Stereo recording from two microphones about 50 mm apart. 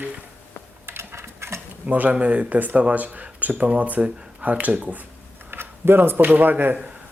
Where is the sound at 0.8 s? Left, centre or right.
Right.